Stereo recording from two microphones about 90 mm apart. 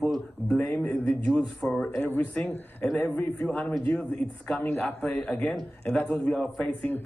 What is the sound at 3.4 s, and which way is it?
A man's voice, 5° left (ahead or behind).